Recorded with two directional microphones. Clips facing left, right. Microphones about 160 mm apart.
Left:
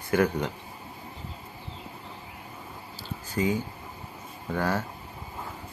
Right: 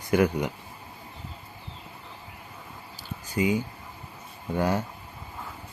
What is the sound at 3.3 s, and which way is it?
Speech, 15° right (ahead or behind).